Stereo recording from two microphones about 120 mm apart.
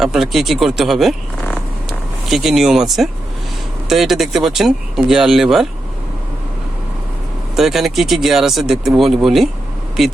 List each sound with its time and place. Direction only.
0.0 s speech: 5° right (ahead or behind)
7.5 s speech: 5° right (ahead or behind)